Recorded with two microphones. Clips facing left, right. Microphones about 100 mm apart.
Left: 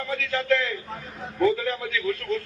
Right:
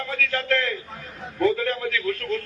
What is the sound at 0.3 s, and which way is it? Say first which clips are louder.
A man's voice: left 2 dB; 5° left (ahead or behind).